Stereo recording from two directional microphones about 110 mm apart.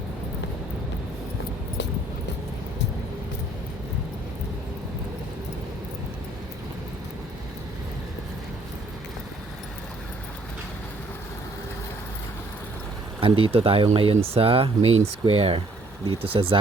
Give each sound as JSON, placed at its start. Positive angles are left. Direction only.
{"t": 13.1, "sound": "speech", "side_deg": -55}